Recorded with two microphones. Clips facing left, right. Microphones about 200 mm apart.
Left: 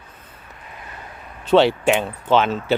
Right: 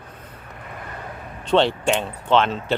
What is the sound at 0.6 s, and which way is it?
Vehicle, 55° right (ahead or behind).